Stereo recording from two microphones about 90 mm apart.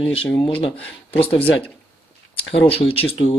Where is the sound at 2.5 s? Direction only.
90° left.